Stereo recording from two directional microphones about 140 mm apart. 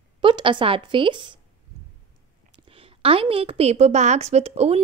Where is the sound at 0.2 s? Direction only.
35° right (ahead or behind).